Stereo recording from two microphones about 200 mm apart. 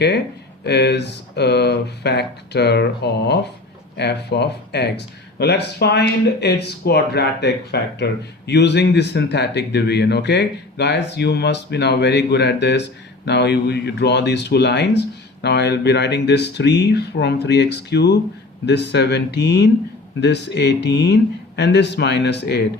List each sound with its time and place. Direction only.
0.6 s speech: 55° left (ahead or behind)